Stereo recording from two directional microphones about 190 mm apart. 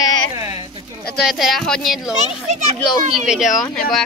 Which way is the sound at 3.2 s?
Centre (ahead or behind).